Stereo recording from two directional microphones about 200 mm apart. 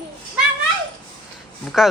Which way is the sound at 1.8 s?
Centre (ahead or behind).